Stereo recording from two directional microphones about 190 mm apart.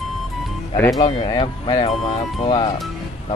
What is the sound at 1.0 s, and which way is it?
Speech, 30° left (ahead or behind).